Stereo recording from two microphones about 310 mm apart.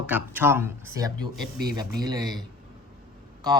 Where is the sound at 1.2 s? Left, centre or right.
Left.